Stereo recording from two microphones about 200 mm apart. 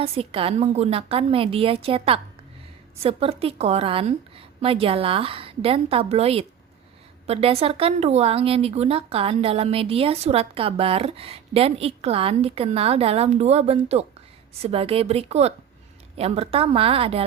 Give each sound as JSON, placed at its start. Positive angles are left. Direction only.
{"t": 0.0, "sound": "a woman's voice", "side_deg": -30}